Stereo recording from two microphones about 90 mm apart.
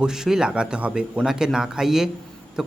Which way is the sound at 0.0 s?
5° right (ahead or behind).